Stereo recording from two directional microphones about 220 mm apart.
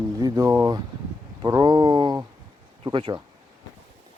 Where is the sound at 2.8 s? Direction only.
25° right (ahead or behind).